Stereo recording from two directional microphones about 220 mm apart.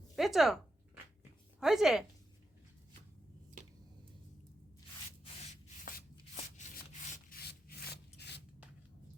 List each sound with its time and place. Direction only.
0.2 s speech: centre (ahead or behind)
5.2 s sanding: 30° left (ahead or behind)